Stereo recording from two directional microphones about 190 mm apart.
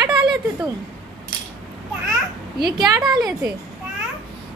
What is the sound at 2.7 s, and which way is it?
Speech, 20° right (ahead or behind).